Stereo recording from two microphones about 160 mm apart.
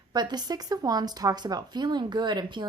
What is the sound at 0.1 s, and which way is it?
A woman's voice, 25° right (ahead or behind).